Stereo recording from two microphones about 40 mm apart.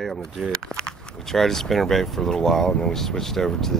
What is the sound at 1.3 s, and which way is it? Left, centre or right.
Speech, centre.